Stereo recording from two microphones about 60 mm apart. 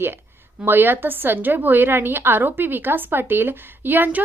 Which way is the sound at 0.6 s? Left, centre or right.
Right.